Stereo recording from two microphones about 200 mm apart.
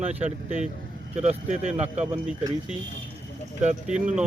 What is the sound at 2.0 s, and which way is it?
Speech, 5° right (ahead or behind).